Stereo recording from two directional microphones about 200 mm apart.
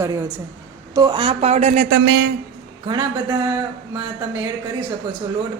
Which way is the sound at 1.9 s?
70° right (ahead or behind).